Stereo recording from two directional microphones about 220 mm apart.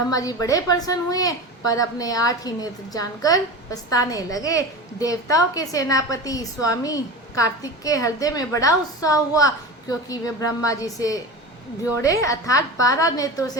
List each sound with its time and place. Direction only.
0.1 s a woman's voice: 15° left (ahead or behind)